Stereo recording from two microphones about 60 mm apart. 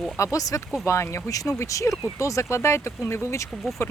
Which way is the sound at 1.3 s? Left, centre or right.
Left.